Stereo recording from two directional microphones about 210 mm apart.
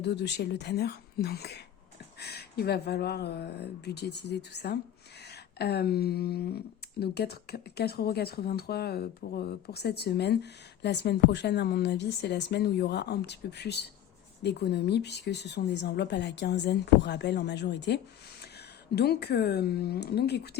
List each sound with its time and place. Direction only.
0.0 s speech: 55° left (ahead or behind)
5.3 s a sound: 50° left (ahead or behind)
7.0 s speech: 50° left (ahead or behind)